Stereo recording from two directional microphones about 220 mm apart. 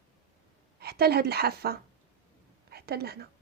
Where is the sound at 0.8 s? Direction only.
45° right (ahead or behind).